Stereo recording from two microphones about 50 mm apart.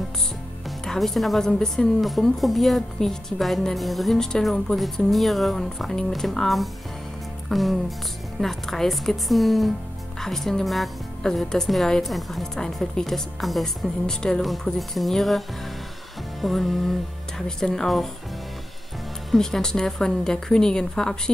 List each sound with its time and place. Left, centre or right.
0.7 s a woman's voice: centre
2.0 s a woman's voice: centre
14.0 s a woman's voice: centre
19.3 s a woman's voice: centre